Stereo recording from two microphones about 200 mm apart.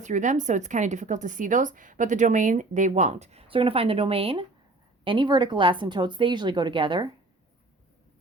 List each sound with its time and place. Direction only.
0.0 s a woman's voice: 40° right (ahead or behind)